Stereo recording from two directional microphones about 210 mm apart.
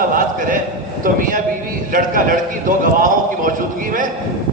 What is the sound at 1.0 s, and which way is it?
A man's voice, 40° right (ahead or behind).